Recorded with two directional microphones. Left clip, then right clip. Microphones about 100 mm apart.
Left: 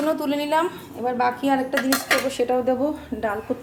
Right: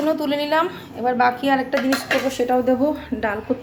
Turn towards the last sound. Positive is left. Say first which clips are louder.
# right 3 dB
turn(degrees=10)  # may be behind; listen again after turning